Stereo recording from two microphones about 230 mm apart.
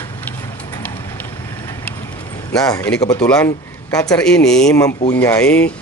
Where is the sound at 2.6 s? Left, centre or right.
Centre.